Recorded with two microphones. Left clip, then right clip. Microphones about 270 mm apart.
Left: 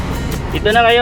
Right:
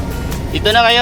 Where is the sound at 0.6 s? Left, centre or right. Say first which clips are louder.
Even; right.